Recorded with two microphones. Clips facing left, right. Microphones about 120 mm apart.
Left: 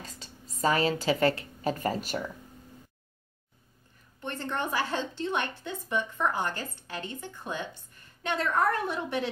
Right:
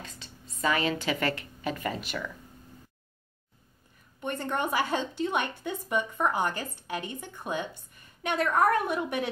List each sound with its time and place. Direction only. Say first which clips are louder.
0.0 s a woman's voice: even; 40° left (ahead or behind)
4.2 s a woman's voice: right 2 dB; 15° right (ahead or behind)